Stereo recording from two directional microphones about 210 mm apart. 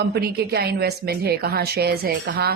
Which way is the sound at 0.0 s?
50° right (ahead or behind).